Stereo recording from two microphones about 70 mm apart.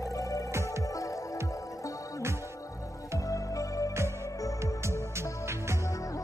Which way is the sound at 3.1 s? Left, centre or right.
Left.